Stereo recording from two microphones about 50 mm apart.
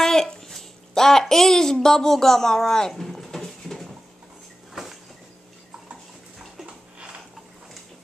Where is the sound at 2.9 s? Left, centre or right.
Centre.